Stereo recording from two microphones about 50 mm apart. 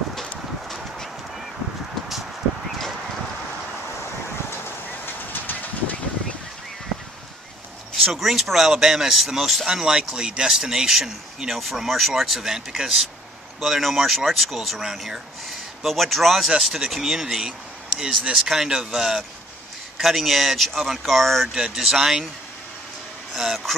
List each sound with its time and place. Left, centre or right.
5.0 s vehicle: left
7.9 s speech: centre
21.7 s speech: centre
23.3 s speech: centre